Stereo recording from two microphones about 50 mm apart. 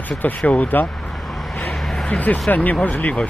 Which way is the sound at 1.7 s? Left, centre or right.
Centre.